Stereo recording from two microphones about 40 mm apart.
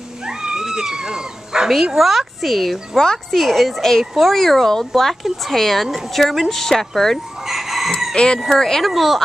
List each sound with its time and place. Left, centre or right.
0.2 s cat: centre
1.7 s speech: centre
7.4 s chicken: centre
8.1 s speech: left
8.5 s a woman's voice: centre
8.8 s speech: centre